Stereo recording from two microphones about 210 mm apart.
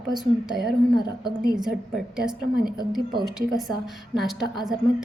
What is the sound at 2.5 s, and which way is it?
Speech, 45° right (ahead or behind).